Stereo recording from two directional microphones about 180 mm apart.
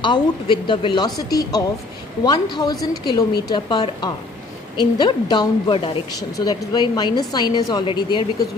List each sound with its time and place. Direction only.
0.0 s a woman's voice: 25° left (ahead or behind)